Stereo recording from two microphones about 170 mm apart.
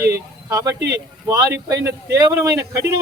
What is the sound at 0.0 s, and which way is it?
Speech, 20° right (ahead or behind).